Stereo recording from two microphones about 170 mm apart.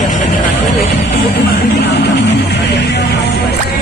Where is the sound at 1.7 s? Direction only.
75° left (ahead or behind).